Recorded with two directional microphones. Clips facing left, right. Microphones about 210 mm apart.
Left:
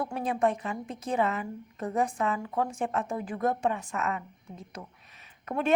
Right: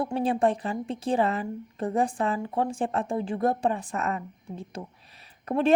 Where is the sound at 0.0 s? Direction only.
30° right (ahead or behind).